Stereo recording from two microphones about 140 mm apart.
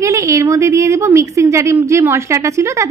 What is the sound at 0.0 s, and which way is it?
A woman's voice, 20° right (ahead or behind).